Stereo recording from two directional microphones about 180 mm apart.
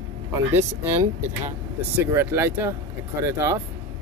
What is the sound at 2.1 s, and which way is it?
Speech, 15° right (ahead or behind).